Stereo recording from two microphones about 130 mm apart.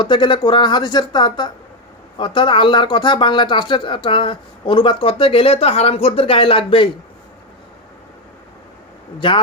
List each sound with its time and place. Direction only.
0.0 s speech: 35° left (ahead or behind)